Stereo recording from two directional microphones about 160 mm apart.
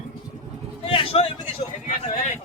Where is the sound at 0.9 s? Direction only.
35° left (ahead or behind).